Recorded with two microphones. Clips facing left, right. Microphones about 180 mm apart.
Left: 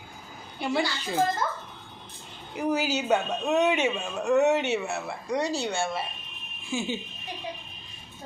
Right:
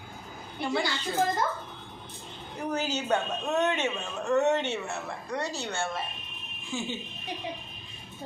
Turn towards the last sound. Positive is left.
turn(degrees=10)  # may be behind; listen again after turning